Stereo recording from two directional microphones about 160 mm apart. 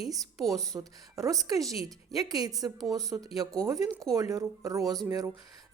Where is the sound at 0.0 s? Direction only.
20° right (ahead or behind).